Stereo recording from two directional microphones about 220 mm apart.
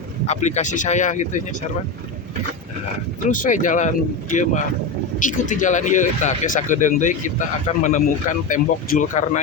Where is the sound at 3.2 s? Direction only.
35° left (ahead or behind).